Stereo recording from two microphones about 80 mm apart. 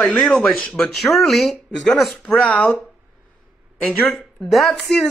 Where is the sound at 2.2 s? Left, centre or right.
Centre.